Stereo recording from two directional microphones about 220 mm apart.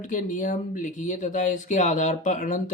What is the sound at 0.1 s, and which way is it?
Speech, 35° left (ahead or behind).